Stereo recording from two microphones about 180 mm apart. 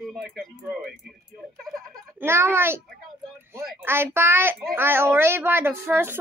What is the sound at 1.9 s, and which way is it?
A woman's voice, 15° right (ahead or behind).